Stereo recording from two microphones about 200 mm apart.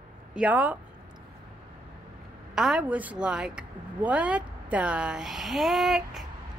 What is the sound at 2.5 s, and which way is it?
A woman's voice, 5° right (ahead or behind).